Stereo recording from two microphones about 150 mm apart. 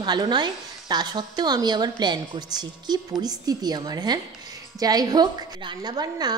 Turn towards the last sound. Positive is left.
turn(degrees=-25)  # may be behind; listen again after turning